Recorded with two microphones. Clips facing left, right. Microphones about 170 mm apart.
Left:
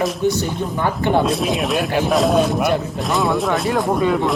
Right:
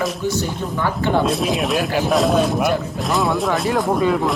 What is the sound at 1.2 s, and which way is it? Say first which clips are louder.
Speech: even; centre (ahead or behind).